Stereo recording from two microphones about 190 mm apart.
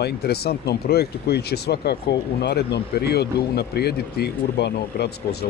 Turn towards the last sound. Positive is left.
turn(degrees=60)  # may be behind; listen again after turning